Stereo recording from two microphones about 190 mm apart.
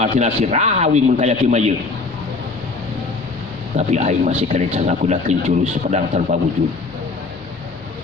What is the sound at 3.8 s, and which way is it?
Speech, 35° right (ahead or behind).